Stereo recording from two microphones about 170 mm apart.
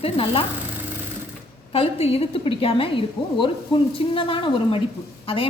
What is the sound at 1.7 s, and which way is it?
A woman's voice, 35° left (ahead or behind).